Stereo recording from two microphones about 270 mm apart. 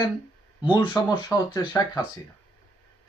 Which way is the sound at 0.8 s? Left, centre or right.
Centre.